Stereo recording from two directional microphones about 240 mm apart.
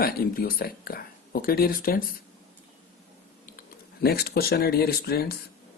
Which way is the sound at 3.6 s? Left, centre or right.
Left.